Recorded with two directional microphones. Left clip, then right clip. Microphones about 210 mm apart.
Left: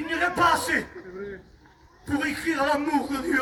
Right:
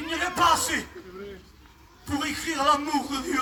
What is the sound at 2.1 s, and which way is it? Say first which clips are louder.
Speech: left 2 dB; 20° right (ahead or behind).